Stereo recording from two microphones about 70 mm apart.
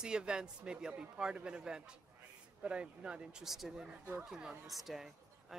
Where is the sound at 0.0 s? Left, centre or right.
Centre.